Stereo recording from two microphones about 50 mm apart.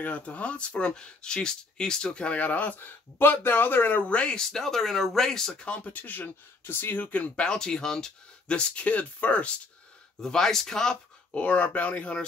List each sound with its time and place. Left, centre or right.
0.0 s speech: left
4.0 s speech: left
4.5 s speech: centre
5.6 s speech: left
7.4 s speech: centre
10.2 s speech: centre
11.3 s speech: left